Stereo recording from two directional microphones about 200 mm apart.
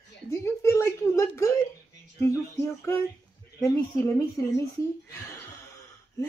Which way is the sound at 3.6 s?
15° left (ahead or behind).